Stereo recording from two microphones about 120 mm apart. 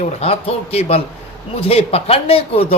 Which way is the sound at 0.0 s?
55° left (ahead or behind).